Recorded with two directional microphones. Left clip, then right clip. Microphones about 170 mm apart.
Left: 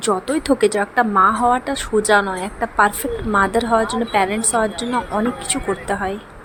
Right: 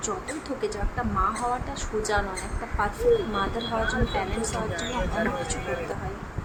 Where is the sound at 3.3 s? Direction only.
45° left (ahead or behind).